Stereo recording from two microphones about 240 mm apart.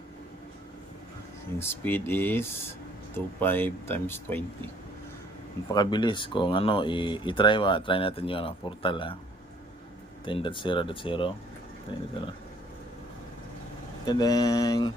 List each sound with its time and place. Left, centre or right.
1.5 s speech: centre
5.7 s speech: centre
10.2 s speech: left
14.1 s speech: centre